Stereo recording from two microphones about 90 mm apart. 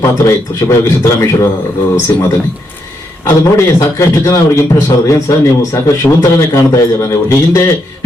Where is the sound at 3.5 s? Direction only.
30° left (ahead or behind).